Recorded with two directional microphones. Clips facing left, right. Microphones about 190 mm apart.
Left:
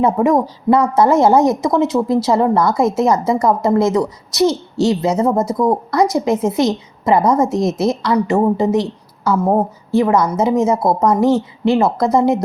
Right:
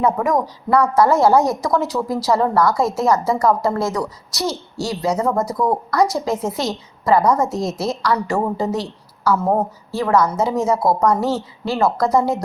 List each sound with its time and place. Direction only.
0.0 s a woman's voice: 25° left (ahead or behind)